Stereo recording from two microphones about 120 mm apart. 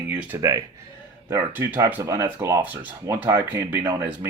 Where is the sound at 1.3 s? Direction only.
15° right (ahead or behind).